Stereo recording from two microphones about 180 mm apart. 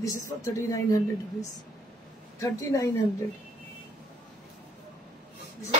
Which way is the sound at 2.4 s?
20° left (ahead or behind).